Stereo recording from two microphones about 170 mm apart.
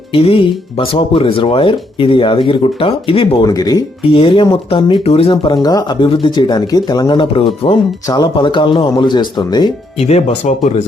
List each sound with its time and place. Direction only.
0.1 s speech: 35° left (ahead or behind)
10.0 s speech: 40° left (ahead or behind)